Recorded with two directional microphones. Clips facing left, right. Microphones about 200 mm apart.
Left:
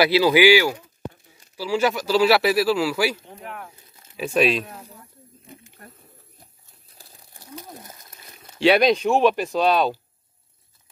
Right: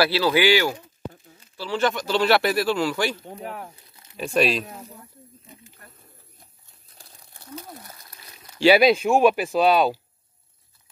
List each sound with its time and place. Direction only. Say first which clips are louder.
0.0 s speech: left 4 dB; 15° left (ahead or behind)
3.3 s speech: right 3 dB; 35° right (ahead or behind)
4.2 s speech: left 1 dB; centre (ahead or behind)
7.3 s a sound: right 1 dB; 15° left (ahead or behind)
8.5 s speech: right 1 dB; 5° right (ahead or behind)